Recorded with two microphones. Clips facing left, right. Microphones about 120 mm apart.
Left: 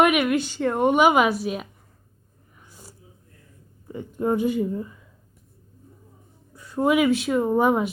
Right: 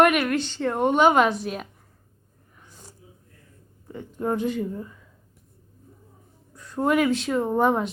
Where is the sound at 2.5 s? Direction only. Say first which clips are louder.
Left 1 dB; 10° left (ahead or behind).